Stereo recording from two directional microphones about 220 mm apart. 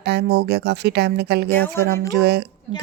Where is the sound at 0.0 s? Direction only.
50° right (ahead or behind).